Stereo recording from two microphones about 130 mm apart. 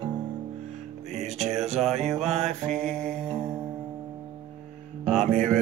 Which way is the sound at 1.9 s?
55° right (ahead or behind).